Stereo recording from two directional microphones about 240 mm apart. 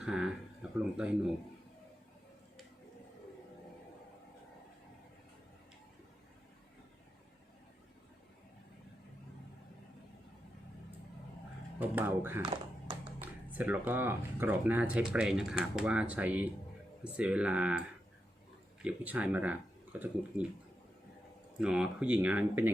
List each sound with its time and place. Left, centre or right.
0.0 s a sound: centre
0.9 s speech: centre
11.8 s speech: centre
12.4 s music: centre
13.2 s speech: centre
21.6 s speech: centre